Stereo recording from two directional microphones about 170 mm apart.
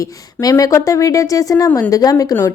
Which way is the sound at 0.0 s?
20° left (ahead or behind).